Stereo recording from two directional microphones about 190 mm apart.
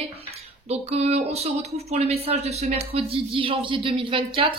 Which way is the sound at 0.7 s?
35° right (ahead or behind).